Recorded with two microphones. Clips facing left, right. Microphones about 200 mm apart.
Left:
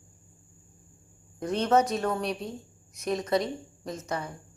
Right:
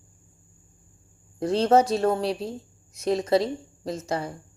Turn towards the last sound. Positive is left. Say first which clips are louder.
# right 5 dB
turn(degrees=-30)  # may be behind; listen again after turning